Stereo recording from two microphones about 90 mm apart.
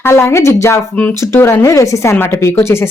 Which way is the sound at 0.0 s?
30° left (ahead or behind).